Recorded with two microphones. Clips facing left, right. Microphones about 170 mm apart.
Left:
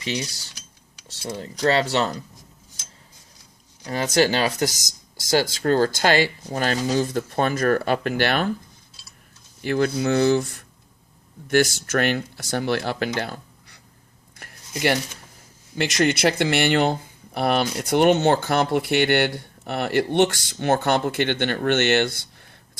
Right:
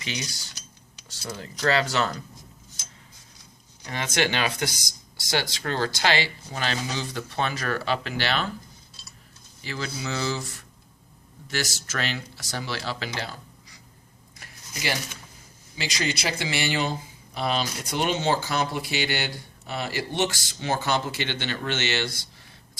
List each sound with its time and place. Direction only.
0.0 s speech: 30° left (ahead or behind)
3.8 s speech: 35° left (ahead or behind)
9.6 s speech: 55° left (ahead or behind)
15.7 s speech: 60° left (ahead or behind)